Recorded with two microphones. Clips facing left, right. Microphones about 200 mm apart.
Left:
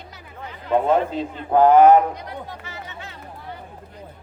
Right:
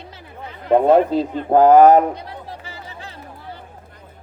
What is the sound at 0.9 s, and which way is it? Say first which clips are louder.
Speech: right 6 dB; 35° right (ahead or behind).